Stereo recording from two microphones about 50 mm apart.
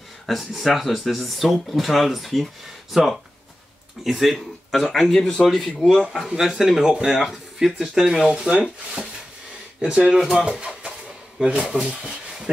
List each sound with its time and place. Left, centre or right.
0.3 s speech: centre
4.0 s speech: centre
6.3 s speech: centre
9.8 s speech: centre
11.4 s speech: right
11.7 s a sound: centre